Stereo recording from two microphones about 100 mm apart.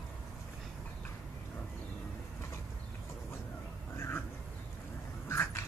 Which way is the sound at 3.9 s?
25° left (ahead or behind).